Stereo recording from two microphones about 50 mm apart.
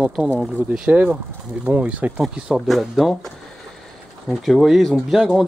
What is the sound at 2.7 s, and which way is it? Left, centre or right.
Speech, centre.